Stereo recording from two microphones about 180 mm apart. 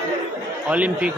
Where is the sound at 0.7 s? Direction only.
5° right (ahead or behind).